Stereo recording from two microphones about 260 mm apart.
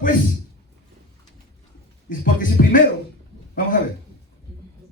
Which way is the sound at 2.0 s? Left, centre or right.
Left.